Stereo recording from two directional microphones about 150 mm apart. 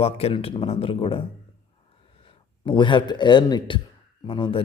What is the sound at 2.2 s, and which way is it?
A man's voice, 35° left (ahead or behind).